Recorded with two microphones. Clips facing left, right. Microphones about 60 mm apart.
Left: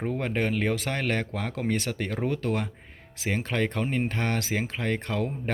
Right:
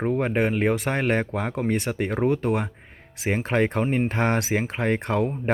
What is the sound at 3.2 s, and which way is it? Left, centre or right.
Speech, right.